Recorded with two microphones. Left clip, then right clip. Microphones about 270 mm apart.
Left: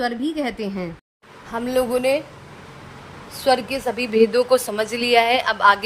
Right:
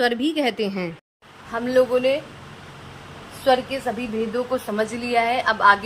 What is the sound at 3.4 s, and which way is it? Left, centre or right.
A woman's voice, left.